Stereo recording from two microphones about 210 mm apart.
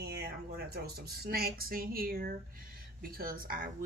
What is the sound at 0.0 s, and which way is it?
Speech, 50° right (ahead or behind).